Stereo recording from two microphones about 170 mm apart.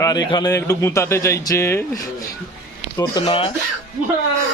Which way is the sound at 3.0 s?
25° left (ahead or behind).